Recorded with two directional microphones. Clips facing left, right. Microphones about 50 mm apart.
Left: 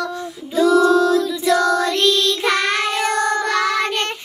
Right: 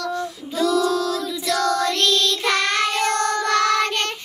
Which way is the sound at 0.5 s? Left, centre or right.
Centre.